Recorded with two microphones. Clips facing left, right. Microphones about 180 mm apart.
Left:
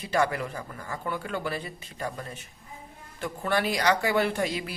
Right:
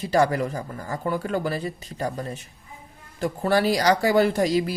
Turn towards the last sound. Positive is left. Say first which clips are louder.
# right 7 dB
turn(degrees=-40)  # may be behind; listen again after turning